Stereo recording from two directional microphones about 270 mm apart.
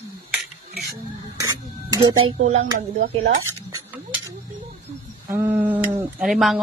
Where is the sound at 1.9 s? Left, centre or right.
Right.